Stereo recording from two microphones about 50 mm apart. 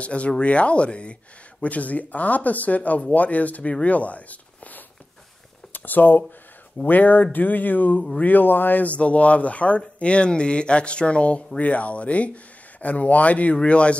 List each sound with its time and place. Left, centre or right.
0.0 s speech: left